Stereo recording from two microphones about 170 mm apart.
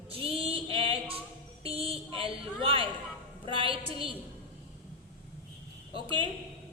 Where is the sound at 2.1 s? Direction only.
30° right (ahead or behind).